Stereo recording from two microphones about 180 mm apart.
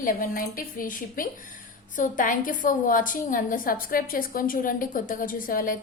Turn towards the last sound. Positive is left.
turn(degrees=50)  # may be behind; listen again after turning